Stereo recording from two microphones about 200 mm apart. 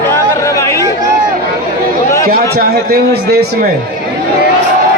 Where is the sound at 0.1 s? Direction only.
15° left (ahead or behind).